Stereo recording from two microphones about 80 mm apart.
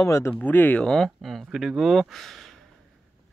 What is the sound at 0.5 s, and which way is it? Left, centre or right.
Speech, left.